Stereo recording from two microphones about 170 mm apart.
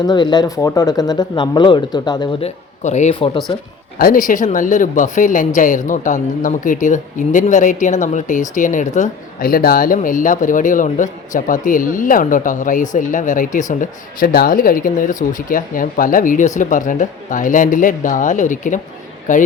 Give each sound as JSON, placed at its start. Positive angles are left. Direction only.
{"t": 0.0, "sound": "speech", "side_deg": 25}
{"t": 2.4, "sound": "speech", "side_deg": 45}
{"t": 3.5, "sound": "speech", "side_deg": 30}
{"t": 3.9, "sound": "speech", "side_deg": 55}